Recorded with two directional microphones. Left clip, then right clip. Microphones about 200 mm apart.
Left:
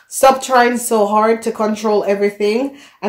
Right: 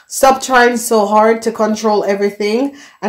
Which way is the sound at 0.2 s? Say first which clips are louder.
Right 1 dB; 30° right (ahead or behind).